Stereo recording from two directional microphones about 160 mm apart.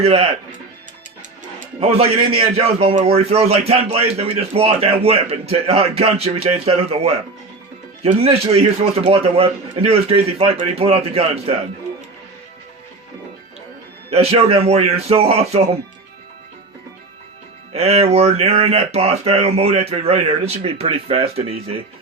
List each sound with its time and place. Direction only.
0.0 s speech: 40° right (ahead or behind)
1.5 s speech: 40° right (ahead or behind)
14.1 s speech: 40° right (ahead or behind)
17.7 s speech: 40° right (ahead or behind)